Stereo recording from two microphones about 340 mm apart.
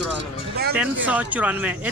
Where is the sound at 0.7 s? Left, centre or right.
Centre.